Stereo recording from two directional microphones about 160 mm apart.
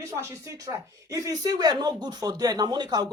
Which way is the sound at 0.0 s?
15° right (ahead or behind).